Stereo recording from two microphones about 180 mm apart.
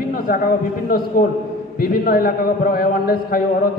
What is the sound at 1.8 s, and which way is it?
A man's voice, 55° left (ahead or behind).